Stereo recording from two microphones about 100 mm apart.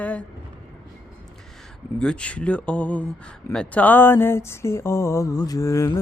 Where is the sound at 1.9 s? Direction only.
10° left (ahead or behind).